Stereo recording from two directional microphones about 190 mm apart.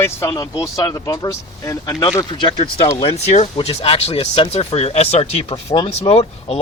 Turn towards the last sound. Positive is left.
turn(degrees=30)  # may be behind; listen again after turning